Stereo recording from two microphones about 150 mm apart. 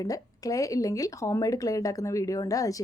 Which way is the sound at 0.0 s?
25° left (ahead or behind).